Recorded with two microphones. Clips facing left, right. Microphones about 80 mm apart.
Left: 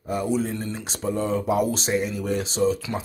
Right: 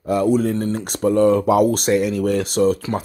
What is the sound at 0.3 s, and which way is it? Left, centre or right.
Speech, right.